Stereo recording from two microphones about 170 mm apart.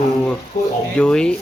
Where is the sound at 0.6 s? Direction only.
50° left (ahead or behind).